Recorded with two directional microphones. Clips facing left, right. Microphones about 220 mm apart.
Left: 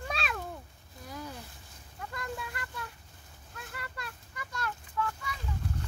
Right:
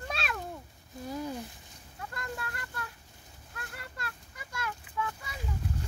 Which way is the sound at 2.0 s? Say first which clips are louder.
Left 1 dB; centre (ahead or behind).